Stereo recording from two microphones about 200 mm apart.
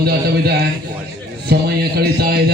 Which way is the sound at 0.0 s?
55° right (ahead or behind).